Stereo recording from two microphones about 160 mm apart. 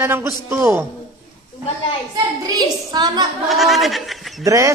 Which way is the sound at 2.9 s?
25° right (ahead or behind).